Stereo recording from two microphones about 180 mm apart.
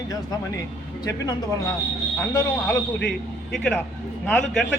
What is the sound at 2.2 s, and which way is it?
Speech, 15° left (ahead or behind).